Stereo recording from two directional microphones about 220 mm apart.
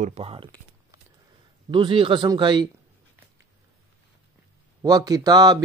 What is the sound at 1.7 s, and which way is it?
Speech, 20° right (ahead or behind).